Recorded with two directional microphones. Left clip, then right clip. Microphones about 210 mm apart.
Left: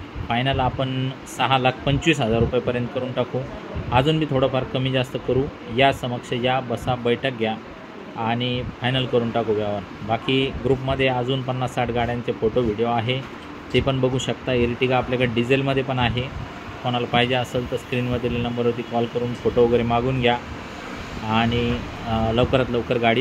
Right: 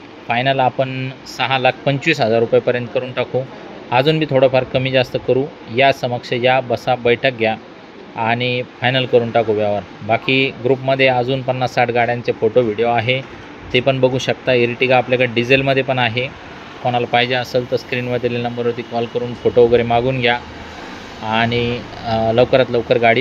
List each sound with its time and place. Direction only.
0.3 s speech: 25° right (ahead or behind)